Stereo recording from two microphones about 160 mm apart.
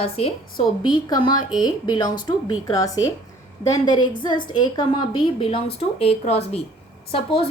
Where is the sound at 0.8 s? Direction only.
25° left (ahead or behind).